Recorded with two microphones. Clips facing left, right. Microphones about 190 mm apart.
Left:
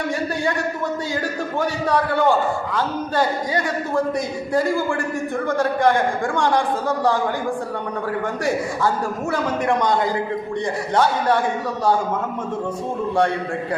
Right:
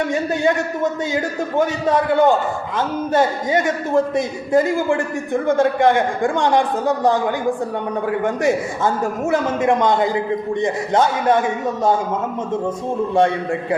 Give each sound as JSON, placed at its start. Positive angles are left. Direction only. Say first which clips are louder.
{"t": 1.1, "sound": "a man's voice", "louder": "right 4 dB", "side_deg": -20}
{"t": 8.2, "sound": "a man's voice", "louder": "right 4 dB", "side_deg": -20}